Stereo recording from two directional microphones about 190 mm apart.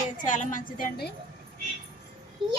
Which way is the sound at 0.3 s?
40° left (ahead or behind).